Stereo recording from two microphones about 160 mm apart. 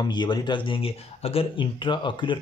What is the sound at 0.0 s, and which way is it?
Speech, 30° left (ahead or behind).